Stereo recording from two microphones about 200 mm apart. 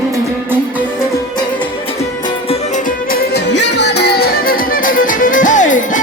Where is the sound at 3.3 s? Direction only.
60° left (ahead or behind).